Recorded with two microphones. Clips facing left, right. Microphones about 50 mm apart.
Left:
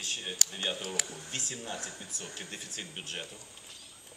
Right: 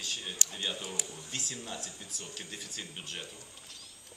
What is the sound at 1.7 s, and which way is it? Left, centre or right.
Speech, left.